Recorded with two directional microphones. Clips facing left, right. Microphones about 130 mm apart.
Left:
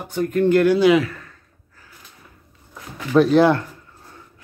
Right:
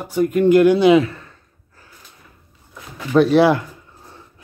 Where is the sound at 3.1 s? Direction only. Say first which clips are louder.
Right 1 dB; 5° right (ahead or behind).